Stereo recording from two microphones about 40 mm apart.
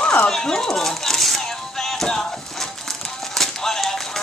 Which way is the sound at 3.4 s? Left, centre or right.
Centre.